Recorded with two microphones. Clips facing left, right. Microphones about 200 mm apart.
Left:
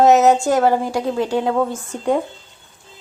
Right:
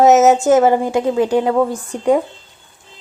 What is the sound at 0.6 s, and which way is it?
A woman's voice, 20° right (ahead or behind).